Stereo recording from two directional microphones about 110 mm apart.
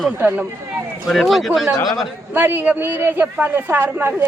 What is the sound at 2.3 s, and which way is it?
Speech, 20° right (ahead or behind).